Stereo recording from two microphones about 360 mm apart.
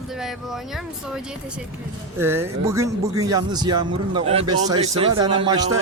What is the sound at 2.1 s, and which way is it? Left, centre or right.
A man's voice, centre.